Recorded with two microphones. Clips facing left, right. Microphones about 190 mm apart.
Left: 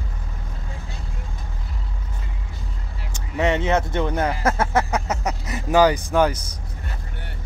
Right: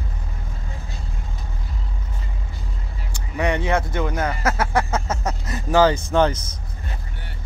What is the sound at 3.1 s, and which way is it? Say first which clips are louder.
Vehicle: left 1 dB; 20° left (ahead or behind).